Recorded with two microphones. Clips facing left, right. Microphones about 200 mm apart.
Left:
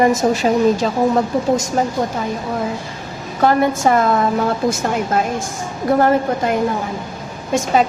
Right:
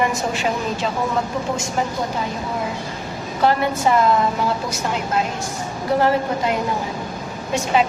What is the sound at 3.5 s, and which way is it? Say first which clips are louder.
Speech: left 4 dB; 45° left (ahead or behind).